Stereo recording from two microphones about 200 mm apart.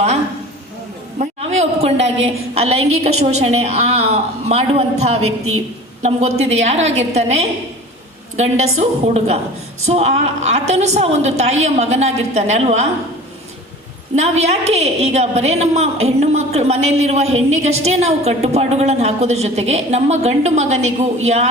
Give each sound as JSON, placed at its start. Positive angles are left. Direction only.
{"t": 1.2, "sound": "a sound", "side_deg": -35}
{"t": 3.0, "sound": "a woman's voice", "side_deg": -30}
{"t": 5.2, "sound": "a woman's voice", "side_deg": -90}
{"t": 6.0, "sound": "a woman's voice", "side_deg": -35}
{"t": 14.2, "sound": "a woman's voice", "side_deg": -35}